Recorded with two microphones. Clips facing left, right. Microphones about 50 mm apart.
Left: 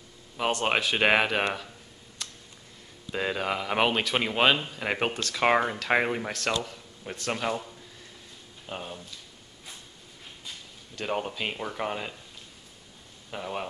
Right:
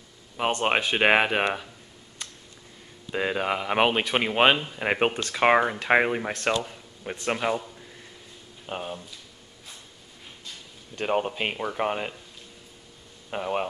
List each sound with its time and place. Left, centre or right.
0.4 s speech: centre
2.2 s a sound: centre
3.1 s speech: centre
8.6 s speech: centre
11.0 s speech: right
11.5 s speech: centre
11.8 s speech: right
13.3 s speech: right